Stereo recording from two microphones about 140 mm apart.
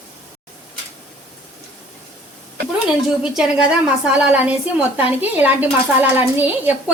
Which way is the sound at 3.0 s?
5° right (ahead or behind).